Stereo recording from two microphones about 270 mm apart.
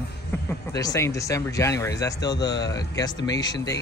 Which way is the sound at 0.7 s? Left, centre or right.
Centre.